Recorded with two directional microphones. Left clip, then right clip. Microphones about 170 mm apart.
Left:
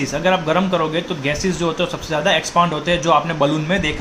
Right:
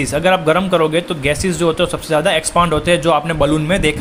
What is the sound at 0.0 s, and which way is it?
A man's voice, 50° right (ahead or behind).